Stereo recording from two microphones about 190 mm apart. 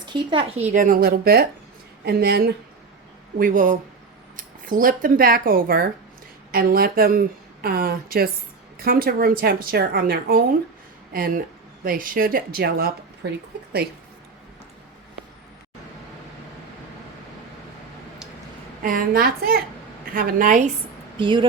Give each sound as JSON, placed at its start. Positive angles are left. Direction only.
{"t": 0.0, "sound": "speech", "side_deg": -25}
{"t": 0.7, "sound": "speech", "side_deg": -45}
{"t": 3.3, "sound": "speech", "side_deg": -45}
{"t": 18.8, "sound": "speech", "side_deg": -45}
{"t": 21.2, "sound": "speech", "side_deg": -25}